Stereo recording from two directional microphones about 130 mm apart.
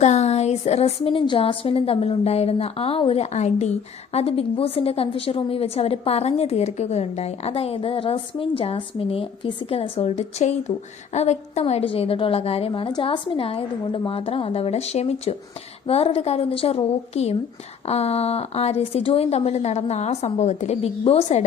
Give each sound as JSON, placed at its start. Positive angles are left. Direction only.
{"t": 0.0, "sound": "a woman's voice", "side_deg": 60}